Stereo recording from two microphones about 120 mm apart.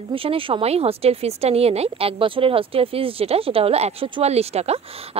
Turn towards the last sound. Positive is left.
turn(degrees=-60)  # may be behind; listen again after turning